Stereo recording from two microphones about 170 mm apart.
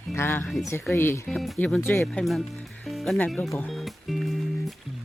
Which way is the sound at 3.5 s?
15° left (ahead or behind).